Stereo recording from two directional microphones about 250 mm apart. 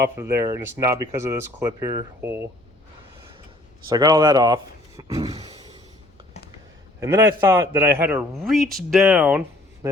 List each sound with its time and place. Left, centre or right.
0.0 s speech: centre
3.8 s speech: centre
7.0 s speech: centre